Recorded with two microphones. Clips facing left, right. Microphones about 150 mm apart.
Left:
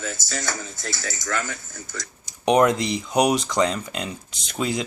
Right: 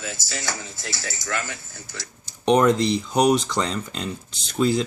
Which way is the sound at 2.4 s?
10° left (ahead or behind).